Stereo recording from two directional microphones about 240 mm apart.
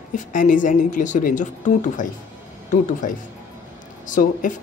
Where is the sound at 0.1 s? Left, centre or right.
Left.